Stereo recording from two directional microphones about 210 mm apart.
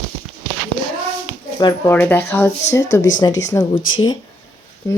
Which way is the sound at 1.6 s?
20° left (ahead or behind).